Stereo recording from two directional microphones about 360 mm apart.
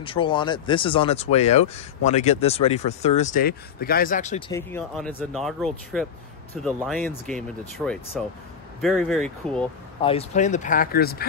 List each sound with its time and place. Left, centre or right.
0.0 s speech: centre
10.0 s speech: centre